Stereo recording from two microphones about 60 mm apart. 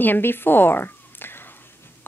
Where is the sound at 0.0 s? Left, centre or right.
Left.